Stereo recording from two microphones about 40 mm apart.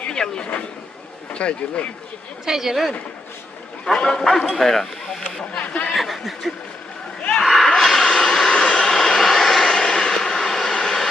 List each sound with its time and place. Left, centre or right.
0.1 s speech: left
2.5 s speech: centre
3.9 s speech: left
4.4 s speech: centre
5.5 s a sound: left
6.0 s a sound: centre
7.8 s vehicle: centre
8.5 s vehicle: left
9.0 s vehicle: centre
9.6 s vehicle: centre